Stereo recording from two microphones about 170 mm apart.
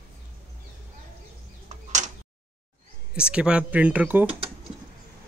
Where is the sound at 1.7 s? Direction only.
45° right (ahead or behind).